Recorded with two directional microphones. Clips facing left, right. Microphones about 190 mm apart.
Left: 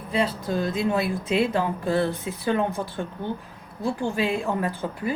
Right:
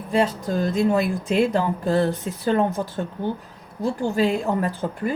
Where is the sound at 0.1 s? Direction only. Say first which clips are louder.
Right 3 dB; 45° right (ahead or behind).